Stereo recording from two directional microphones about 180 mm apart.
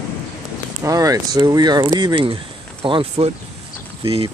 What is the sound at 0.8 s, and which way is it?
Speech, 20° right (ahead or behind).